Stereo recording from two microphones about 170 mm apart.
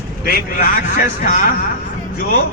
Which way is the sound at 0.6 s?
60° left (ahead or behind).